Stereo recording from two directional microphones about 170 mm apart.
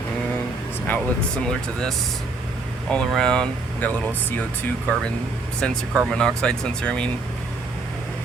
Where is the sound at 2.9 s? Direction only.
5° left (ahead or behind).